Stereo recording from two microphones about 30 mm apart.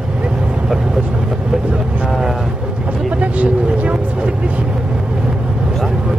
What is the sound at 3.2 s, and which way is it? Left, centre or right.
Speech, right.